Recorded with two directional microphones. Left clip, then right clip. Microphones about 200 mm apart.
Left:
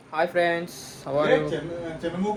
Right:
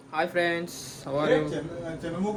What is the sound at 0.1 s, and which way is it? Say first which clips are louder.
A man's voice: left 3 dB; 10° right (ahead or behind).